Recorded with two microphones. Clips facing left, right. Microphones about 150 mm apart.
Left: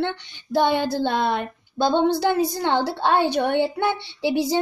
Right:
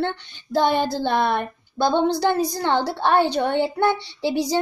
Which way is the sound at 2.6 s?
15° left (ahead or behind).